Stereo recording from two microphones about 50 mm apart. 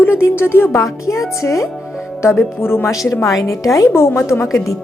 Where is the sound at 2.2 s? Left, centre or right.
Left.